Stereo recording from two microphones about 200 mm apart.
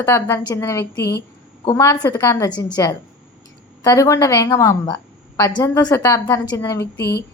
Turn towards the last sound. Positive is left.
turn(degrees=55)  # may be behind; listen again after turning